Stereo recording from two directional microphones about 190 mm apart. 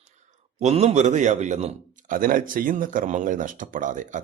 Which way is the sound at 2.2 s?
45° right (ahead or behind).